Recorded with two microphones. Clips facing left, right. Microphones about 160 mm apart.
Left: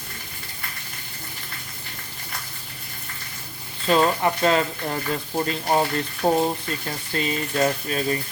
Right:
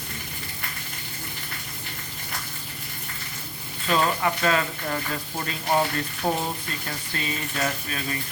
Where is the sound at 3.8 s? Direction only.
30° left (ahead or behind).